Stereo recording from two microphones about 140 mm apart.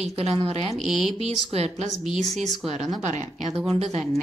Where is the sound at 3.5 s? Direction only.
45° right (ahead or behind).